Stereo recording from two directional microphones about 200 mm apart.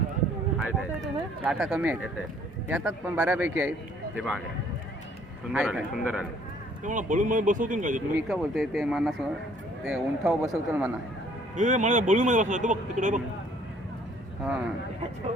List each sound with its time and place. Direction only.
0.6 s speech: 15° right (ahead or behind)
1.5 s a man's voice: 5° right (ahead or behind)
5.5 s a man's voice: 5° right (ahead or behind)
6.8 s speech: 40° right (ahead or behind)
8.3 s a man's voice: centre (ahead or behind)
11.5 s speech: 40° right (ahead or behind)